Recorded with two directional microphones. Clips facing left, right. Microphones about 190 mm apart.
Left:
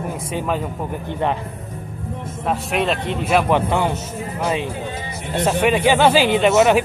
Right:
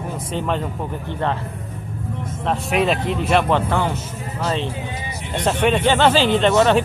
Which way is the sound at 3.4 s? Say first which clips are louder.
Left 1 dB; 15° left (ahead or behind).